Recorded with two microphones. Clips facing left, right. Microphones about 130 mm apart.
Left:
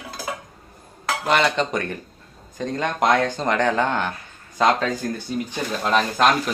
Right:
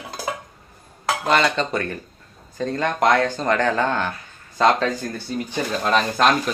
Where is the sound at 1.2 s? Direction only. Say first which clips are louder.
Even; 15° left (ahead or behind).